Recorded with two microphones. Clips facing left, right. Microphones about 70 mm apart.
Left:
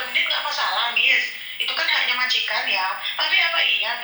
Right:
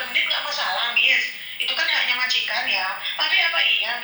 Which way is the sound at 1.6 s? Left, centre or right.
Left.